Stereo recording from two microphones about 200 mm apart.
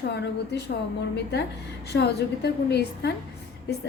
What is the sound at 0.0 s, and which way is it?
A woman's voice, 55° left (ahead or behind).